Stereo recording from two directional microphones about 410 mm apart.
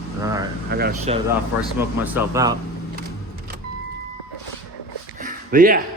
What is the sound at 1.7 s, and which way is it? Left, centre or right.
Speech, centre.